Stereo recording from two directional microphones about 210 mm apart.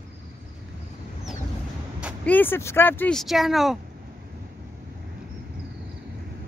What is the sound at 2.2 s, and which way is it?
Speech, 10° left (ahead or behind).